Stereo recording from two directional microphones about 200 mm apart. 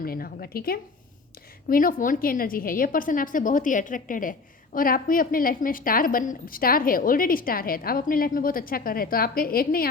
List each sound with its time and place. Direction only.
0.0 s a woman's voice: 45° left (ahead or behind)